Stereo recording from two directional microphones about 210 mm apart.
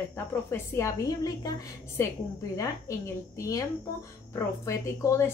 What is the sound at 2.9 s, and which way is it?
A woman's voice, 15° left (ahead or behind).